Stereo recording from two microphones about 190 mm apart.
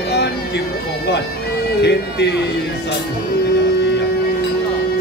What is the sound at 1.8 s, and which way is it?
Speech, 60° left (ahead or behind).